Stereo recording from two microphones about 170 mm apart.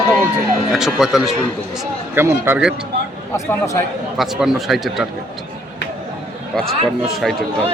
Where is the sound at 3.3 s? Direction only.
20° left (ahead or behind).